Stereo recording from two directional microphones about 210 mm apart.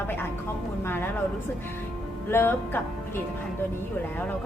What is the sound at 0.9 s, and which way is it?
Speech, 10° left (ahead or behind).